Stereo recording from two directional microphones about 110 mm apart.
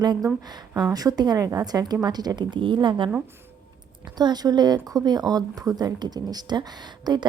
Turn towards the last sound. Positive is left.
turn(degrees=-40)  # may be behind; listen again after turning